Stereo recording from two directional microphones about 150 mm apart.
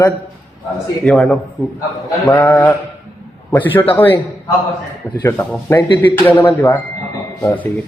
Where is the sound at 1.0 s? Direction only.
5° left (ahead or behind).